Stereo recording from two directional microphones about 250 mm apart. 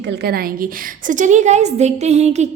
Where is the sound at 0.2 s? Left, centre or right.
Right.